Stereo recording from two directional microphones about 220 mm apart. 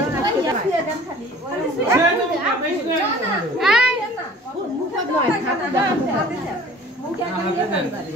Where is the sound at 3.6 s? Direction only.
Centre (ahead or behind).